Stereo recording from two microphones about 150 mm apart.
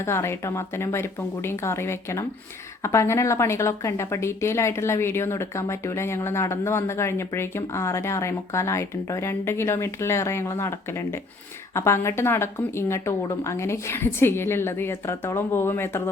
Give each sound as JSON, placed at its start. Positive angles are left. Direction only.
{"t": 0.0, "sound": "speech", "side_deg": 15}